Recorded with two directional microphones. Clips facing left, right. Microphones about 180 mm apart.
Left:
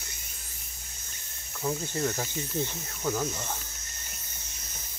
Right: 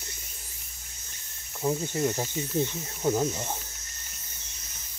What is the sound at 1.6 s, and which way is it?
Speech, 20° right (ahead or behind).